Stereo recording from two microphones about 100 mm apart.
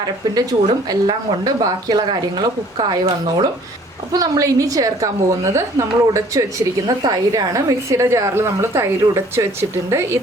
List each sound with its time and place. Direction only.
0.3 s a woman's voice: 45° right (ahead or behind); by 10.2 s 25° right (ahead or behind)